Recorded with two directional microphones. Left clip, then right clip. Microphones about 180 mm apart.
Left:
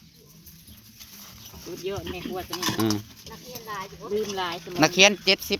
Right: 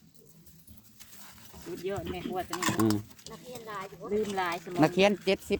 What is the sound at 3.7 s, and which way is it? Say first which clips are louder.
Speech: left 5 dB; 35° left (ahead or behind).